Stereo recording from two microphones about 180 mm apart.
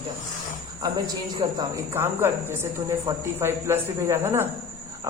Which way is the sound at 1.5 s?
15° right (ahead or behind).